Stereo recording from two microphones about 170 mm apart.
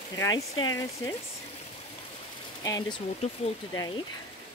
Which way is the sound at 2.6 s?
20° left (ahead or behind).